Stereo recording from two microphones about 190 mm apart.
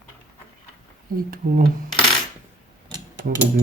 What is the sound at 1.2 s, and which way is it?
Speech, 50° right (ahead or behind).